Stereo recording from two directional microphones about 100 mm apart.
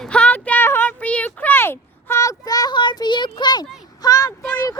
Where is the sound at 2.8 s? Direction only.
50° left (ahead or behind).